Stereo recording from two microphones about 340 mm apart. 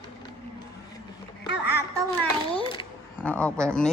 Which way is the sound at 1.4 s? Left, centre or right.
Left.